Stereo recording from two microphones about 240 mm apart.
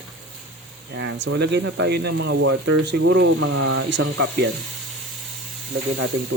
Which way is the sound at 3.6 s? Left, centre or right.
Right.